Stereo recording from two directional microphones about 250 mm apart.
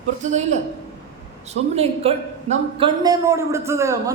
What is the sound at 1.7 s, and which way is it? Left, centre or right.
A man's voice, right.